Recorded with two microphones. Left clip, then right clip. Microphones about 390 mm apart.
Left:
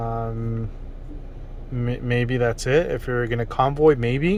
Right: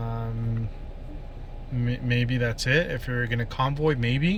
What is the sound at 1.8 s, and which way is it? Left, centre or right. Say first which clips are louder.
Speech: left 4 dB; centre.